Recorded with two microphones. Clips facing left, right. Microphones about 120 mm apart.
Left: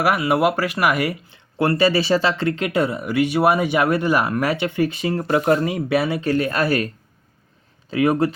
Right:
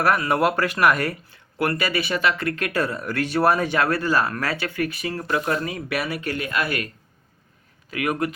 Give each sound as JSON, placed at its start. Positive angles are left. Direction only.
{"t": 0.0, "sound": "speech", "side_deg": 10}
{"t": 7.9, "sound": "speech", "side_deg": 30}